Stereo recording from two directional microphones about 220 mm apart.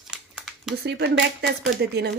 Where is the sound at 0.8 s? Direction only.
50° right (ahead or behind).